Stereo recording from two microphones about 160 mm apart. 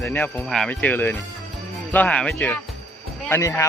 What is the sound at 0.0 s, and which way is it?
Speech, 10° left (ahead or behind).